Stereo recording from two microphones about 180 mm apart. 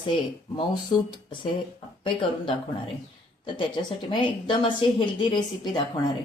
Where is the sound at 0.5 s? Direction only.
25° left (ahead or behind).